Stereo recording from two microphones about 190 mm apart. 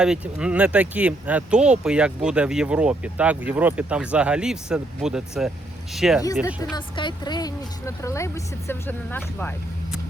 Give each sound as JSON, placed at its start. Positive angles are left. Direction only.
{"t": 0.0, "sound": "speech", "side_deg": -5}
{"t": 6.2, "sound": "speech", "side_deg": 20}